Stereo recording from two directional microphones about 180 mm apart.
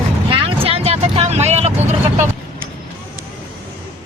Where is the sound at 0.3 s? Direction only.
30° right (ahead or behind).